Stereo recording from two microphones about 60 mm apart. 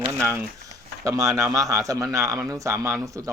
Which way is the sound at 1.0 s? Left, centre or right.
Right.